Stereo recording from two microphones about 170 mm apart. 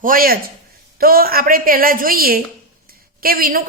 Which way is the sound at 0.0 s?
55° right (ahead or behind).